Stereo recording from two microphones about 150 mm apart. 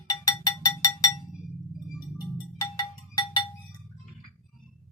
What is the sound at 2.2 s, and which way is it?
Music, 25° left (ahead or behind).